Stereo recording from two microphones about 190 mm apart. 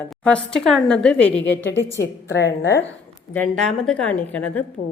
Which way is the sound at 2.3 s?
65° left (ahead or behind).